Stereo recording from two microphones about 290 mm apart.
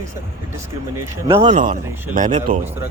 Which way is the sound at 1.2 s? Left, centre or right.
Right.